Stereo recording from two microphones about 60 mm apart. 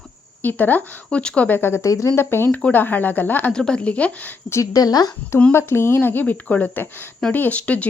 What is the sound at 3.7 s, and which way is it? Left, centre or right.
Speech, left.